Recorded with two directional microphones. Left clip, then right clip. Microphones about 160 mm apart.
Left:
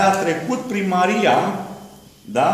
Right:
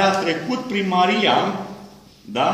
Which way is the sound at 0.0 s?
10° left (ahead or behind).